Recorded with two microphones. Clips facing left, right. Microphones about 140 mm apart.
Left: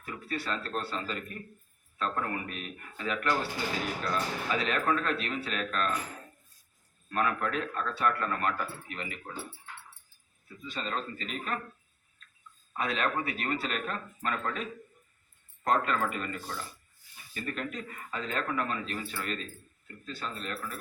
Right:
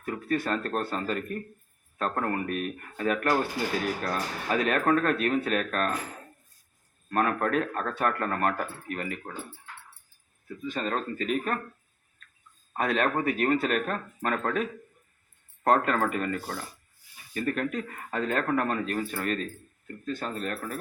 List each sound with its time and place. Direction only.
0.0 s speech: 50° right (ahead or behind)
7.1 s speech: 45° right (ahead or behind)
10.6 s speech: 50° right (ahead or behind)
12.7 s speech: 50° right (ahead or behind)